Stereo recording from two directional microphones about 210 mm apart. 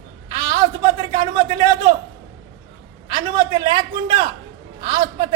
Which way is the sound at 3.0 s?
25° right (ahead or behind).